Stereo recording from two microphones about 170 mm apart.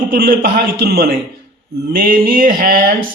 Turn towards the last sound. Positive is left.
turn(degrees=-60)  # may be behind; listen again after turning